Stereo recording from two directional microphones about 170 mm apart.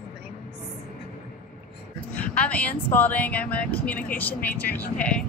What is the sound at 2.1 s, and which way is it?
Speech, 10° left (ahead or behind).